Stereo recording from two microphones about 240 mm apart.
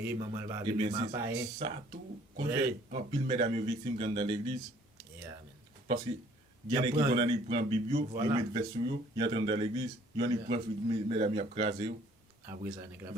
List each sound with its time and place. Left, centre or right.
0.0 s a man's voice: centre
1.5 s speech: right
6.7 s a man's voice: centre